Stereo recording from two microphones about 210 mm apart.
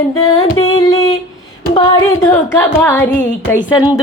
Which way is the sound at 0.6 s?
20° left (ahead or behind).